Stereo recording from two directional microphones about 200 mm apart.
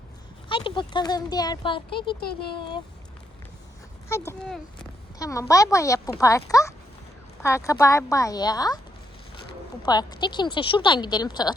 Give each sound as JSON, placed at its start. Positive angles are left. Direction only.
{"t": 0.4, "sound": "speech", "side_deg": 25}
{"t": 4.1, "sound": "speech", "side_deg": 15}
{"t": 9.8, "sound": "speech", "side_deg": 20}